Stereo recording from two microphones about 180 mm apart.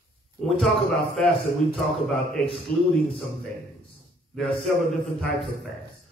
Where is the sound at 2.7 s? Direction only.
50° left (ahead or behind).